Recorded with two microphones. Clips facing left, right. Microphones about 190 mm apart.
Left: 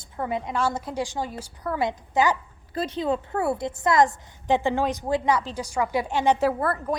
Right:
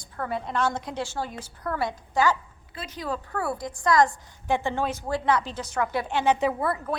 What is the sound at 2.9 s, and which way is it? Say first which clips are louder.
A woman's voice: left 4 dB; 25° left (ahead or behind).